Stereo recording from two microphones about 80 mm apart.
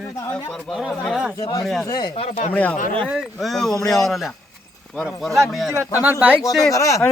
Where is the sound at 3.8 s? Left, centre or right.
Left.